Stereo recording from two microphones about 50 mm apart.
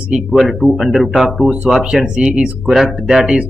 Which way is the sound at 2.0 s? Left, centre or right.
Centre.